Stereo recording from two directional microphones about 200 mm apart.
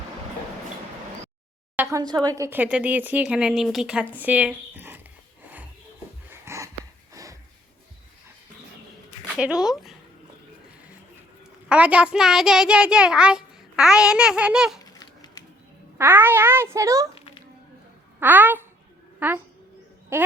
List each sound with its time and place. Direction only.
1.7 s speech: 15° right (ahead or behind)
6.3 s a sound: 15° right (ahead or behind)
9.0 s speech: 5° right (ahead or behind)
11.7 s a child's voice: 5° right (ahead or behind)
14.9 s a sound: 20° left (ahead or behind)
16.0 s speech: 10° right (ahead or behind)
18.2 s speech: 10° right (ahead or behind)